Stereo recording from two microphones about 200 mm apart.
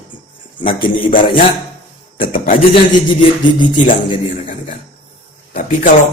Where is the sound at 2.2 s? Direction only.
45° left (ahead or behind).